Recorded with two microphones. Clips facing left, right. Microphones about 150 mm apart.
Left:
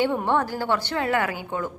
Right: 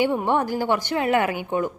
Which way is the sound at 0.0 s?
15° right (ahead or behind).